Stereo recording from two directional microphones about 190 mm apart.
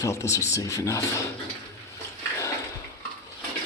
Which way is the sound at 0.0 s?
15° left (ahead or behind).